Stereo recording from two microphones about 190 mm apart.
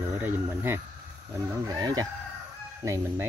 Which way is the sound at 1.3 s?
20° right (ahead or behind).